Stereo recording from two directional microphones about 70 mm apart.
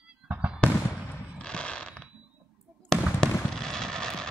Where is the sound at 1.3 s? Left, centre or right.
Centre.